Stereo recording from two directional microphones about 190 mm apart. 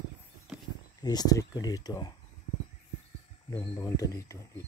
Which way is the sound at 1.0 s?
20° left (ahead or behind).